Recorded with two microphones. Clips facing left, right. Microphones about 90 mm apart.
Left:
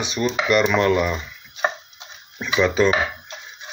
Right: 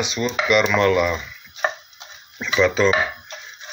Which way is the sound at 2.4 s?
15° left (ahead or behind).